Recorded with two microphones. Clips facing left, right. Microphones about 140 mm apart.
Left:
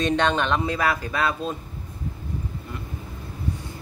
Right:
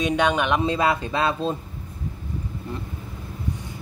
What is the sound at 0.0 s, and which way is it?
Speech, 10° right (ahead or behind).